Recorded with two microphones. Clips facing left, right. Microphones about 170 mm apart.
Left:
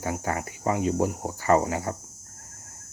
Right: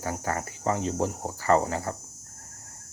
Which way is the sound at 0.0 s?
15° left (ahead or behind).